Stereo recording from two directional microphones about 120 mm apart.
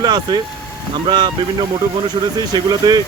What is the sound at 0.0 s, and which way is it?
Speech, 35° right (ahead or behind).